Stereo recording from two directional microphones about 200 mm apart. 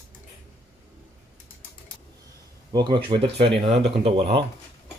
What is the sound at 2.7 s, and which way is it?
Speech, 20° right (ahead or behind).